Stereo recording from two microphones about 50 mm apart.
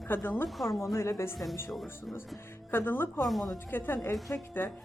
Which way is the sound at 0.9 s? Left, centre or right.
Left.